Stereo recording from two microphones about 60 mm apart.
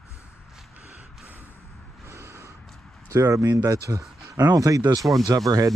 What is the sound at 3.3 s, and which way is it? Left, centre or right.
Speech, right.